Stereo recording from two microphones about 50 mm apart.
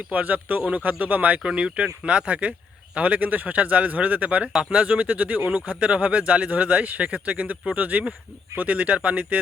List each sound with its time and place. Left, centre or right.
0.1 s speech: right
1.4 s speech: centre